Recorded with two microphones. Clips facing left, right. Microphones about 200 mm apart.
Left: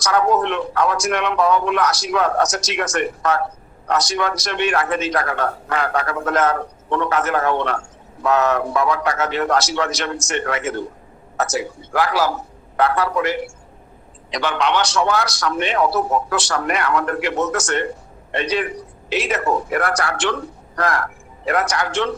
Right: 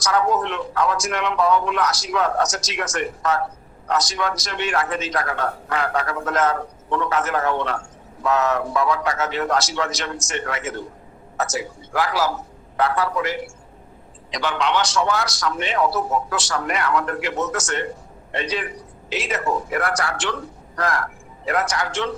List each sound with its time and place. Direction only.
0.0 s a man's voice: 65° left (ahead or behind)